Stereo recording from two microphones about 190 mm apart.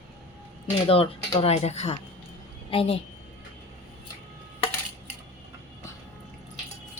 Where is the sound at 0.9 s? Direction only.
30° left (ahead or behind).